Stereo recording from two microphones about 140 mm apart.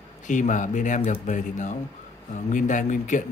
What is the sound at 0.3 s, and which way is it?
A man's voice, 65° left (ahead or behind).